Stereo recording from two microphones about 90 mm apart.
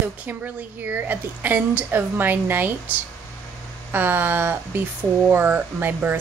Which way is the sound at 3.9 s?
20° right (ahead or behind).